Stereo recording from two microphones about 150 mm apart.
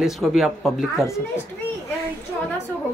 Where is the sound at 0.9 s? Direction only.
20° left (ahead or behind).